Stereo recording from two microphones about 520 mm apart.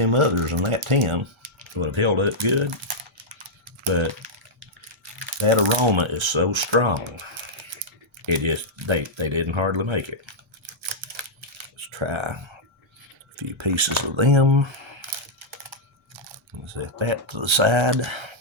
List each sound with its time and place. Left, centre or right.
0.0 s speech: right
3.9 s speech: right
5.4 s speech: right
8.3 s speech: right
10.8 s camera: right
13.3 s speech: right
14.2 s typing: right
16.6 s speech: right